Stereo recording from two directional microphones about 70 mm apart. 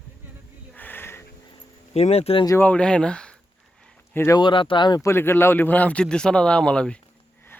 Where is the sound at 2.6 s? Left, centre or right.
Centre.